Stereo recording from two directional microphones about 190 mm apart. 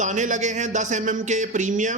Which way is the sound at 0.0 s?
40° right (ahead or behind).